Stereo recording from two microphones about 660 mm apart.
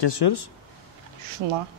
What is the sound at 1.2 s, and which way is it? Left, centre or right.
Speech, right.